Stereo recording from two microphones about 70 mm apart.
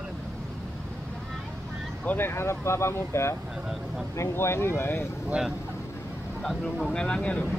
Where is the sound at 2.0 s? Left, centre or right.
Left.